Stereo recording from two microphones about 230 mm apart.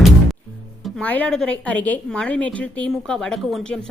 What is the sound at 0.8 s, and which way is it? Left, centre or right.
Speech, centre.